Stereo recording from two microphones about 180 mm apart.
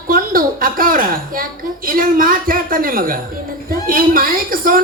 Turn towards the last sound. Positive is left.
turn(degrees=-50)  # may be behind; listen again after turning